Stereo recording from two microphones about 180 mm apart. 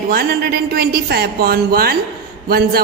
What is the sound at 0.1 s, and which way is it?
A woman's voice, 60° right (ahead or behind).